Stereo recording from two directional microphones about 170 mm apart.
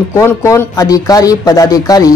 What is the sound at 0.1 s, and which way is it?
Speech, 15° left (ahead or behind).